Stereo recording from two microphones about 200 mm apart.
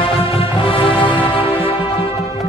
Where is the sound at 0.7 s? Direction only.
10° left (ahead or behind).